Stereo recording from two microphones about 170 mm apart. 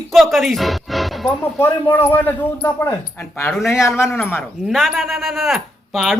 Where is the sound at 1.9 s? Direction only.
10° left (ahead or behind).